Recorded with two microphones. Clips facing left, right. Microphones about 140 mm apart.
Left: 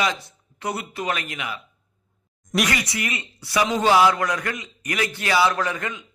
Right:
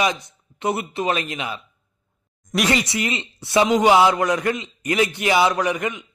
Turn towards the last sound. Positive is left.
turn(degrees=-20)  # may be behind; listen again after turning